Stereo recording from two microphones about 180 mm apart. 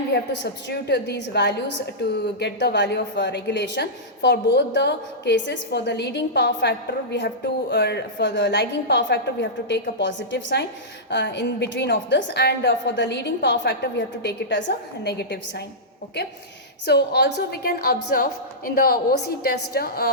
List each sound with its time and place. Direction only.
0.1 s a woman's voice: 65° left (ahead or behind)
16.8 s a woman's voice: 65° left (ahead or behind)